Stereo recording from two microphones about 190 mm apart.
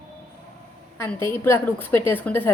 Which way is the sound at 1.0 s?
15° left (ahead or behind).